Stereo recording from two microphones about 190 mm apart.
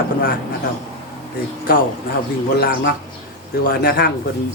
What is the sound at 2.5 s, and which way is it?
A man's voice, 55° left (ahead or behind).